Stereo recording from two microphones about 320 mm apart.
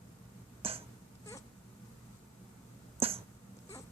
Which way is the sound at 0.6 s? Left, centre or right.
Centre.